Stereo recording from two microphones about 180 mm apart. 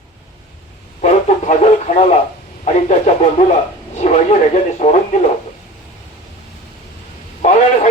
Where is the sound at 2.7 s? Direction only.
40° left (ahead or behind).